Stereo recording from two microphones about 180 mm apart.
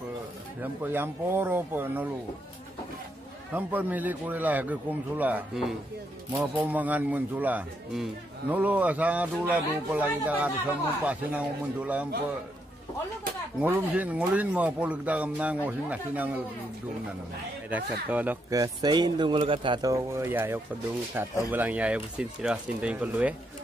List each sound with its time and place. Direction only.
0.6 s speech: 10° right (ahead or behind)
3.5 s speech: 10° right (ahead or behind)
13.6 s speech: 10° right (ahead or behind)
17.6 s speech: 10° right (ahead or behind)
18.6 s speech: 25° right (ahead or behind); by 23.3 s 10° right (ahead or behind)